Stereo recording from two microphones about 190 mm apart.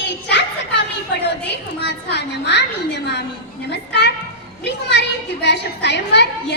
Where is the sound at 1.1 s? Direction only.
65° left (ahead or behind).